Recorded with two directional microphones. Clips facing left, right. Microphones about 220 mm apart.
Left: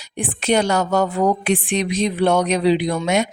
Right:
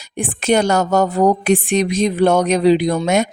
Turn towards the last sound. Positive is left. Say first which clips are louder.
# right 3 dB
turn(degrees=-45)  # may be behind; listen again after turning